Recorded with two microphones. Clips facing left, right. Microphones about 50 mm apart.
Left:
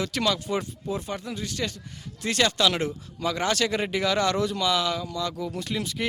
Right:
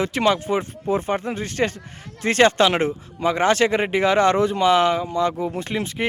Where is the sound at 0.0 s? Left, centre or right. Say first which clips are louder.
Right 6 dB; right.